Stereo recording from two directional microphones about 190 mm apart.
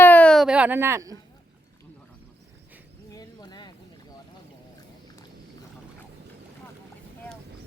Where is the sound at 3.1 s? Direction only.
20° left (ahead or behind).